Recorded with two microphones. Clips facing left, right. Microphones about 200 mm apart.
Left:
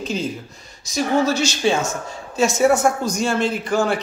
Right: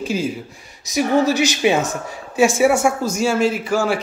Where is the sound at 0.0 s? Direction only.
10° right (ahead or behind).